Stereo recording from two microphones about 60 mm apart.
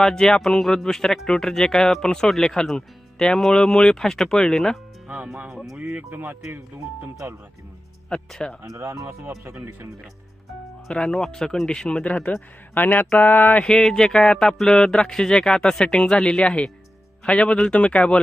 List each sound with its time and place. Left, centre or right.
0.0 s speech: centre
5.0 s music: centre
5.5 s speech: centre
6.1 s speech: right
8.1 s speech: centre
8.6 s speech: right
9.6 s speech: right
10.8 s speech: centre; by 13.7 s left
13.7 s speech: centre